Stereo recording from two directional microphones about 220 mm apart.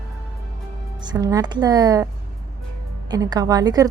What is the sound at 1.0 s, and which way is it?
A woman's voice, 20° right (ahead or behind).